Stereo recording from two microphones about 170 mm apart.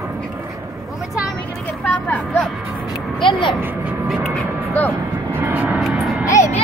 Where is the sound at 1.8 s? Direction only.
10° left (ahead or behind).